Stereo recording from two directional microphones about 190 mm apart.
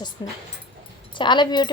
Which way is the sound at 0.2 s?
20° left (ahead or behind).